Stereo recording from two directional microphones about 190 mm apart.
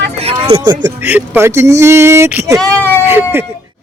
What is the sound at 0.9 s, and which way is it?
Speech, 10° right (ahead or behind).